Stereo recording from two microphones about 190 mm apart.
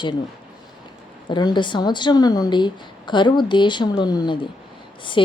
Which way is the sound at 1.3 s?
25° left (ahead or behind).